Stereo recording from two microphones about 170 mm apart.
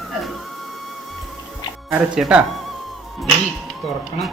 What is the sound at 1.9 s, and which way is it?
Speech, 5° right (ahead or behind).